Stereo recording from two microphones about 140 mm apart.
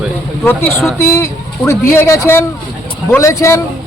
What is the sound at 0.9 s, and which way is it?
A man's voice, 20° left (ahead or behind).